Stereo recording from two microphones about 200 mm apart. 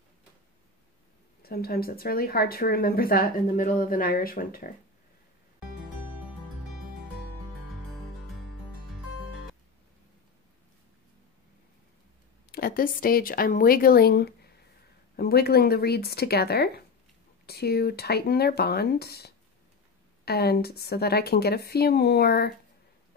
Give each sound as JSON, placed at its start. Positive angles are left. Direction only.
{"t": 1.4, "sound": "speech", "side_deg": 50}
{"t": 12.4, "sound": "speech", "side_deg": 50}